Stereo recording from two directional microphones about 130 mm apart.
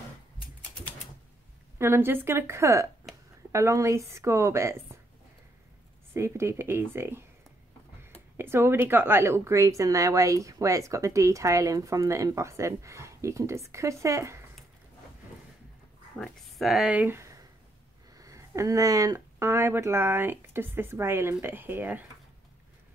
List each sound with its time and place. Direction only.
1.8 s a woman's voice: 20° right (ahead or behind)
6.1 s a woman's voice: 20° right (ahead or behind)
8.4 s a woman's voice: 20° right (ahead or behind)
16.2 s a woman's voice: centre (ahead or behind)